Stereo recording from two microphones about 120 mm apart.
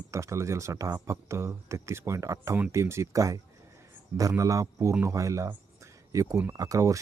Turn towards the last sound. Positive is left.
turn(degrees=-30)  # may be behind; listen again after turning